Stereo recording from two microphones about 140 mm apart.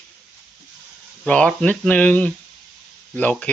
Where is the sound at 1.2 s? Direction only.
5° left (ahead or behind).